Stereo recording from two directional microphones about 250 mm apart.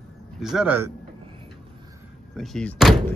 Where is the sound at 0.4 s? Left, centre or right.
Centre.